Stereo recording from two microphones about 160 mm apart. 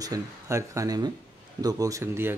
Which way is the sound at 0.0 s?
20° right (ahead or behind).